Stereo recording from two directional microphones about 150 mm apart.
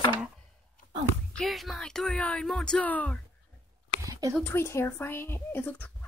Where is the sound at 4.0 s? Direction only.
20° right (ahead or behind).